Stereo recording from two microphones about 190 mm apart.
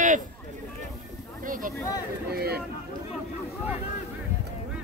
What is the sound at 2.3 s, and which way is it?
Speech, 55° right (ahead or behind).